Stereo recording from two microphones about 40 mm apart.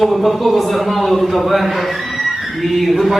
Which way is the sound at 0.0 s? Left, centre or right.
Centre.